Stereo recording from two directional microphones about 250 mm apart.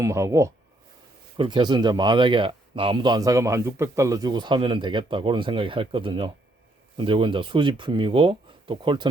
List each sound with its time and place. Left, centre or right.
0.0 s speech: centre